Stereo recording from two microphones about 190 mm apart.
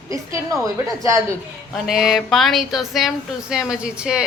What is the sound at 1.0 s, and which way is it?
Speech, 15° right (ahead or behind).